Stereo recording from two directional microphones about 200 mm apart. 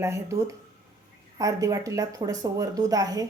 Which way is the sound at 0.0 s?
15° right (ahead or behind).